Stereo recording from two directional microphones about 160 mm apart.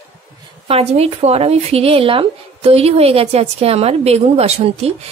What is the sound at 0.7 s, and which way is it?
Speech, 40° right (ahead or behind).